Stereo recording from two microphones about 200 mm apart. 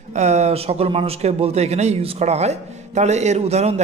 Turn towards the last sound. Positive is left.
turn(degrees=-30)  # may be behind; listen again after turning